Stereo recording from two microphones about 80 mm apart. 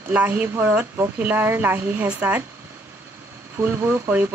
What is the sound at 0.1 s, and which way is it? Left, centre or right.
Speech, right.